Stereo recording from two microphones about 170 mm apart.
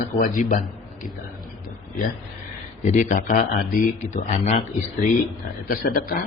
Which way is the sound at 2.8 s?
50° left (ahead or behind).